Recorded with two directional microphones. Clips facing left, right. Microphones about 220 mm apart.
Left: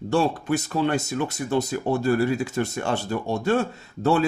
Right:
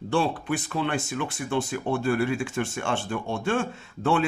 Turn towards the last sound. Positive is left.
turn(degrees=40)  # may be behind; listen again after turning